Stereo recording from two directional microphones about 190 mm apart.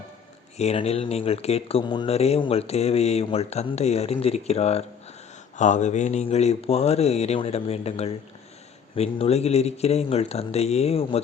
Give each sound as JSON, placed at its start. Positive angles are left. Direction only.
{"t": 0.5, "sound": "speech", "side_deg": 35}